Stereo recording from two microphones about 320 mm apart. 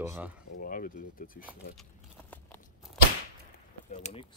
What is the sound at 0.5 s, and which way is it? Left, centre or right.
Speech, left.